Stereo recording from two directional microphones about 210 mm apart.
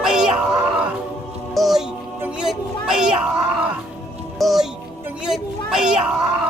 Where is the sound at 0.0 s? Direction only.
5° right (ahead or behind).